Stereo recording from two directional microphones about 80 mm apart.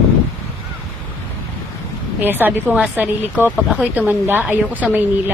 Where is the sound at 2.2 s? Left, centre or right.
Right.